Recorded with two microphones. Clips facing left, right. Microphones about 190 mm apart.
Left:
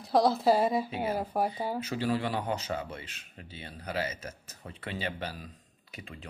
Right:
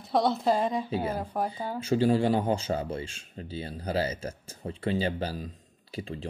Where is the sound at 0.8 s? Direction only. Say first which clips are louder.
Right 2 dB; 30° right (ahead or behind).